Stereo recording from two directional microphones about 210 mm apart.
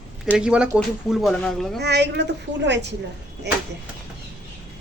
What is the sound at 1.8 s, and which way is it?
Speech, 55° right (ahead or behind).